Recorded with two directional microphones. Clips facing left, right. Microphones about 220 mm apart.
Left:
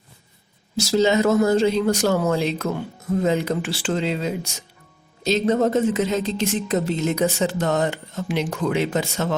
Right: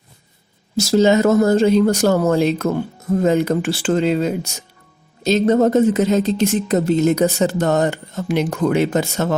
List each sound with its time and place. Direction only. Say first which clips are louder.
0.8 s speech: right 4 dB; 45° right (ahead or behind)